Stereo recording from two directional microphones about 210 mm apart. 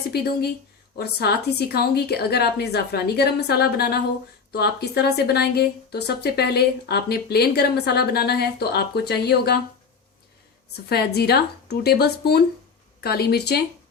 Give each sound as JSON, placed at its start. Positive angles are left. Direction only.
{"t": 0.1, "sound": "speech", "side_deg": 50}
{"t": 10.8, "sound": "speech", "side_deg": 50}